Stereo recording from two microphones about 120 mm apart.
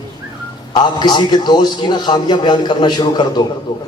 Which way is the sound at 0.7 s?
40° left (ahead or behind).